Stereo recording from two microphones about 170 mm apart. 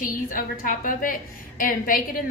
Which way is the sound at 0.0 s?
55° left (ahead or behind).